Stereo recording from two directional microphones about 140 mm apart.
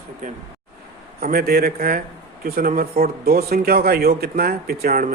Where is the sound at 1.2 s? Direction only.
90° right.